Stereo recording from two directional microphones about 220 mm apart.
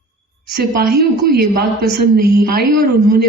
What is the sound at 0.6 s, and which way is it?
A woman's voice, 45° right (ahead or behind).